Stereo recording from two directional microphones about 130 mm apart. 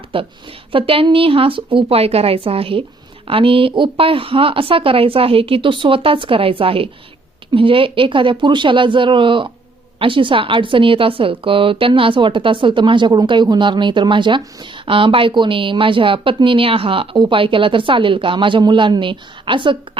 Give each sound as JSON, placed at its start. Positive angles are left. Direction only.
{"t": 0.1, "sound": "a woman's voice", "side_deg": -45}